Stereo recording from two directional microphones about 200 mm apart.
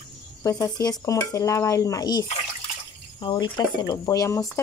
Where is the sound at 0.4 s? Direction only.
15° left (ahead or behind).